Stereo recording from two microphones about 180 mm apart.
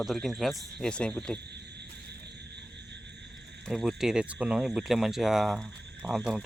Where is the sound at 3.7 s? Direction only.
Centre (ahead or behind).